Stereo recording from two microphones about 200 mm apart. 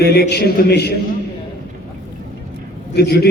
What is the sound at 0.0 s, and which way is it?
Speech, 55° left (ahead or behind).